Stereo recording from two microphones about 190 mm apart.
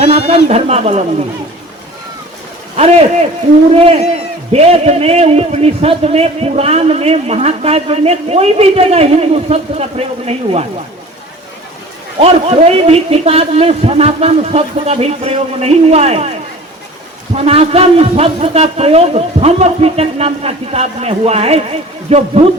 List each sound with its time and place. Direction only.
0.3 s a man's voice: 35° right (ahead or behind)
2.7 s a man's voice: 35° right (ahead or behind)
12.2 s a man's voice: 30° right (ahead or behind)
17.3 s a man's voice: 30° right (ahead or behind)